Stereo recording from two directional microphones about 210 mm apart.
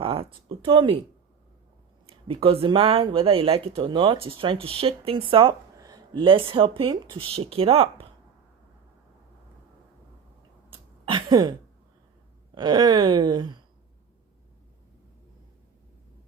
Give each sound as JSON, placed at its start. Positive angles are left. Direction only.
{"t": 0.0, "sound": "speech", "side_deg": -25}
{"t": 2.0, "sound": "speech", "side_deg": -25}
{"t": 10.7, "sound": "a sound", "side_deg": -20}
{"t": 12.5, "sound": "speech", "side_deg": -20}